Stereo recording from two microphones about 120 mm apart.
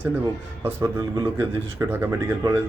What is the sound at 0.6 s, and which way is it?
Speech, 25° right (ahead or behind).